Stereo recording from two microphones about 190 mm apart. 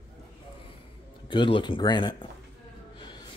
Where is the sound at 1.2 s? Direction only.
25° left (ahead or behind).